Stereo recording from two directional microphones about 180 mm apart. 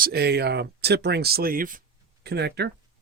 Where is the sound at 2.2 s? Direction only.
65° right (ahead or behind).